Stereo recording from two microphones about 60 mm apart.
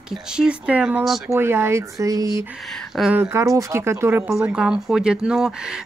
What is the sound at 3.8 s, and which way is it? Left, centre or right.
Speech, right.